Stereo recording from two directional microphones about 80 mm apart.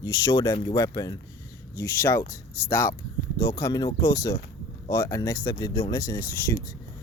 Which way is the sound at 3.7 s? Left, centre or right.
Left.